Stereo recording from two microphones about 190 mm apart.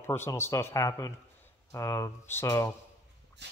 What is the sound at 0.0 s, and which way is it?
Speech, 10° left (ahead or behind).